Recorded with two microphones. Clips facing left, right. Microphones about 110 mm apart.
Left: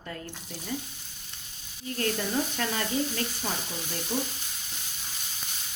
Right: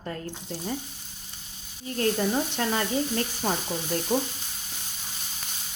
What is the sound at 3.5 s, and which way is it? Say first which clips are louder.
Speech: right 6 dB; 40° right (ahead or behind).